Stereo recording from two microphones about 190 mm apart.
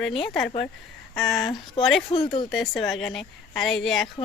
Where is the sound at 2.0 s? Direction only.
25° left (ahead or behind).